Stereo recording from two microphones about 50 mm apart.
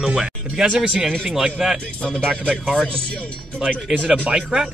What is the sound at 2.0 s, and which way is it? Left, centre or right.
Speech, centre.